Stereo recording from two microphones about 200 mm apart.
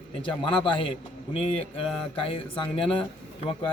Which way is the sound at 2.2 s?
25° left (ahead or behind).